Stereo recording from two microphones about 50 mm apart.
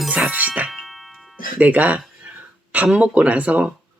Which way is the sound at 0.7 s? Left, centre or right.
Centre.